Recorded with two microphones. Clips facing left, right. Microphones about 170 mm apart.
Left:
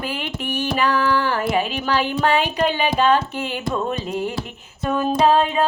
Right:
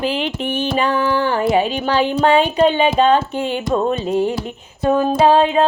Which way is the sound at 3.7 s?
35° right (ahead or behind).